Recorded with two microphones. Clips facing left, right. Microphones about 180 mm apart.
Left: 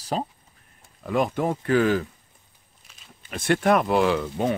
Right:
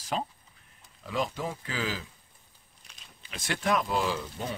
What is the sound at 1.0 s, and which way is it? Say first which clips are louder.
Speech: left 8 dB; 55° left (ahead or behind).